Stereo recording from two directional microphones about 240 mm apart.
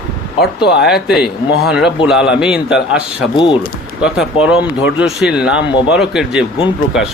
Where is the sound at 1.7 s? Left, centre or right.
Centre.